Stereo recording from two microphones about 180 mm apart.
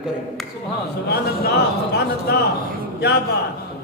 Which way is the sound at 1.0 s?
60° left (ahead or behind).